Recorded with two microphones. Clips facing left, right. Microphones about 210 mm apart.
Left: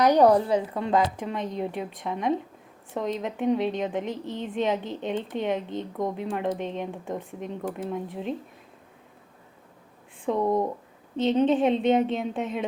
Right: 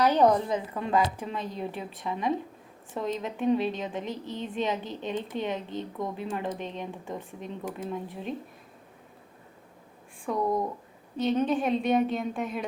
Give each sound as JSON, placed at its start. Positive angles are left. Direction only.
{"t": 0.0, "sound": "a woman's voice", "side_deg": 15}
{"t": 10.2, "sound": "a woman's voice", "side_deg": 25}